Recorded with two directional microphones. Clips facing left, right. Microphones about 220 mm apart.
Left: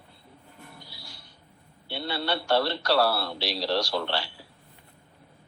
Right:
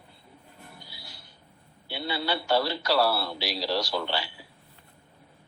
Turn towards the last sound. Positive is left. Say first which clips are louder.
# left 1 dB
turn(degrees=0)  # may be behind; listen again after turning